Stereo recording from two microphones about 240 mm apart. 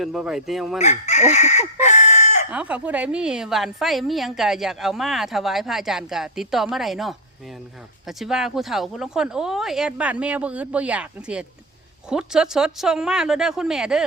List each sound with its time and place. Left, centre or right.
0.0 s a woman's voice: centre
0.8 s chicken: left
2.5 s a woman's voice: centre